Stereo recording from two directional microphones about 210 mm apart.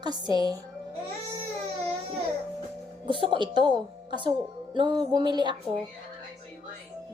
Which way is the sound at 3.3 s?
20° right (ahead or behind).